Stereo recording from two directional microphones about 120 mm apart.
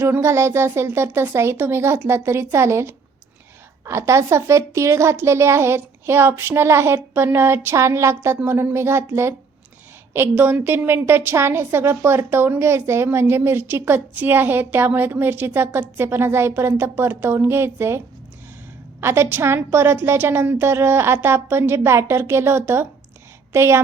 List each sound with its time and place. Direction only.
0.0 s a woman's voice: 20° right (ahead or behind)